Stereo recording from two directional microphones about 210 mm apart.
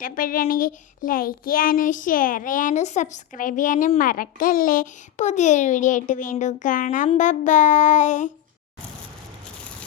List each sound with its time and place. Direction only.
0.0 s a child's voice: 40° left (ahead or behind)